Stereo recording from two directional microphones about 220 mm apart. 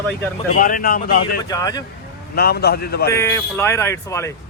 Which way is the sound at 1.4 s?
15° left (ahead or behind).